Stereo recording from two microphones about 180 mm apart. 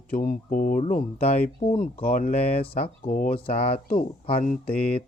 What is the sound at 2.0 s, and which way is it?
Speech, 45° left (ahead or behind).